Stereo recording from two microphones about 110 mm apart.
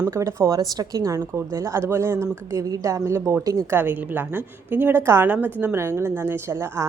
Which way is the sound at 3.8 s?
15° right (ahead or behind).